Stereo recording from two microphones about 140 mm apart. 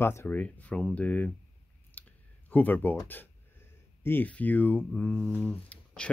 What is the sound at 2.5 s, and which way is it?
Speech, 10° left (ahead or behind).